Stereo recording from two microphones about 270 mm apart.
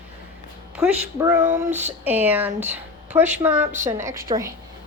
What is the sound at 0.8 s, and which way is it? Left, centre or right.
Speech, centre.